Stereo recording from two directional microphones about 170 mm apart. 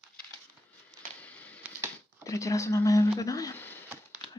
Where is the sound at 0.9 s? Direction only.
10° left (ahead or behind).